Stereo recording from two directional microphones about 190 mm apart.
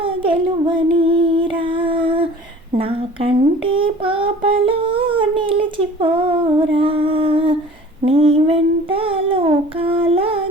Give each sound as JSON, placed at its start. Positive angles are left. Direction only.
{"t": 0.0, "sound": "child singing", "side_deg": -25}
{"t": 2.7, "sound": "a sound", "side_deg": -30}
{"t": 8.0, "sound": "child singing", "side_deg": -30}